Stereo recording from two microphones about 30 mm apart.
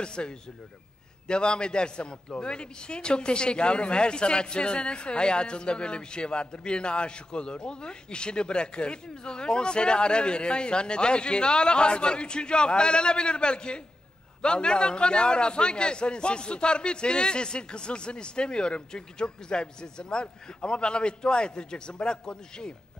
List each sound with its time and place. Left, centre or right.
0.0 s a man's voice: left